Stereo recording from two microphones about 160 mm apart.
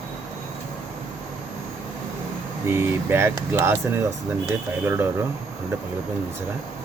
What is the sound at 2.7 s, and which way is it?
Speech, 15° right (ahead or behind).